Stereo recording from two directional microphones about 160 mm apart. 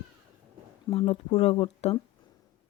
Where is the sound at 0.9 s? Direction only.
35° left (ahead or behind).